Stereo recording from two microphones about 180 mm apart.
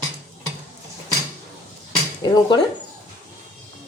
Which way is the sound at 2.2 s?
20° left (ahead or behind).